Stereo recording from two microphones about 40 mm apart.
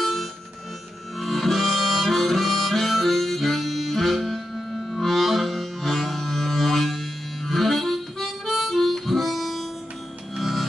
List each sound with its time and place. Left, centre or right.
0.0 s music: centre
1.2 s harmonica: centre
4.9 s music: centre